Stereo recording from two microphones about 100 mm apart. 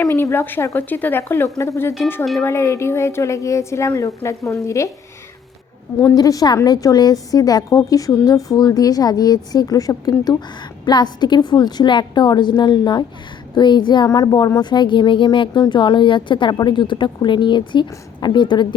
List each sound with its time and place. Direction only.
0.0 s a woman's voice: 30° left (ahead or behind)
6.1 s a woman's voice: 40° left (ahead or behind)